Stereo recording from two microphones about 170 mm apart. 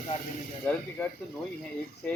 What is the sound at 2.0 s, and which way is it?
Speech, 10° left (ahead or behind).